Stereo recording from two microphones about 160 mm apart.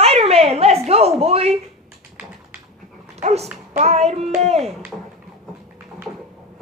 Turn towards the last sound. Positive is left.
turn(degrees=-40)  # may be behind; listen again after turning